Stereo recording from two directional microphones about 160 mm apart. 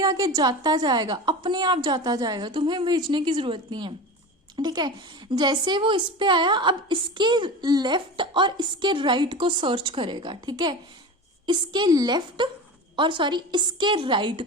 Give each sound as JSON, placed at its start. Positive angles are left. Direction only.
{"t": 0.0, "sound": "a woman's voice", "side_deg": -20}